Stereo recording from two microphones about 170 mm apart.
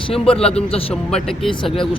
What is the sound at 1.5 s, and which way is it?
Speech, 30° left (ahead or behind).